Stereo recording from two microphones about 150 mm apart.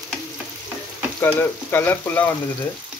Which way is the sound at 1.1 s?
10° left (ahead or behind).